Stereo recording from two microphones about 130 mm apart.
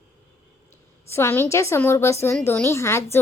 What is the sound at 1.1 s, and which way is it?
Speech, 20° left (ahead or behind).